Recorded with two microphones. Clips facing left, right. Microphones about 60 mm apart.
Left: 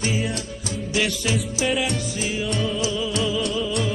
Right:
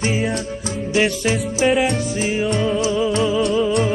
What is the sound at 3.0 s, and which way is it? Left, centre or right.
Music, right.